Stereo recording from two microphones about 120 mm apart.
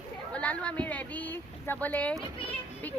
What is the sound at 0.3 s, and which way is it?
Speech, 10° left (ahead or behind).